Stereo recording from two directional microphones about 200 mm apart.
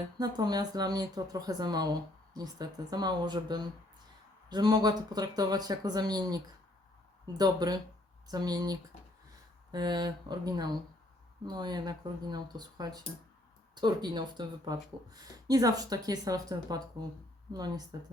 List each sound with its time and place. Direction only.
0.2 s speech: 20° right (ahead or behind)